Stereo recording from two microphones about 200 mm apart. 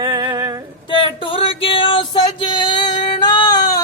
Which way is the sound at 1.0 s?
25° left (ahead or behind).